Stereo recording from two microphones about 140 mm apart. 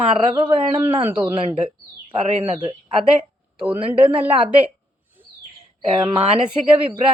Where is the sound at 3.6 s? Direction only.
35° right (ahead or behind).